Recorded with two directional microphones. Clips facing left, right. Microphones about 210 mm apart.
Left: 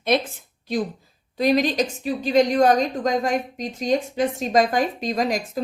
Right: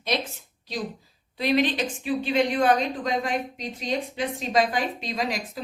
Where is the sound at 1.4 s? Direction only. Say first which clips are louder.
Left 4 dB; 40° left (ahead or behind).